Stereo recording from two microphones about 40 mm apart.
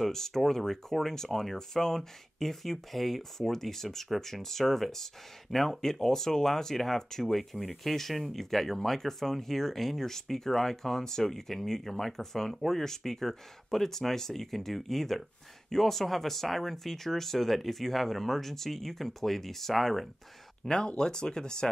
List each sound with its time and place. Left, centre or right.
0.0 s speech: centre
7.5 s speech: centre
7.9 s speech: centre
20.6 s speech: centre